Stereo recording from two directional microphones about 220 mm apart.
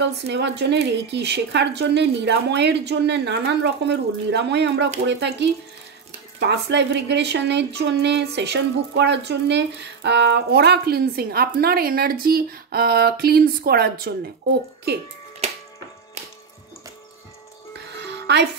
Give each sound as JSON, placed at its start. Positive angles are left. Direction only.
{"t": 0.0, "sound": "a woman's voice", "side_deg": -50}
{"t": 18.0, "sound": "music", "side_deg": -50}